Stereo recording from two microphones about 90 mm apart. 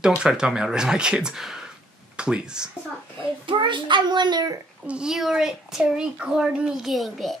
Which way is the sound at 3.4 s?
65° right (ahead or behind).